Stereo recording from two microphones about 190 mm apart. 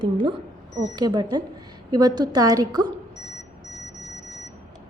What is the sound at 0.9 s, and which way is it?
A woman's voice, 20° right (ahead or behind).